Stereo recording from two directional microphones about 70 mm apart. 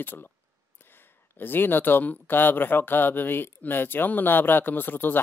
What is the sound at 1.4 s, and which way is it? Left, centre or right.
Speech, left.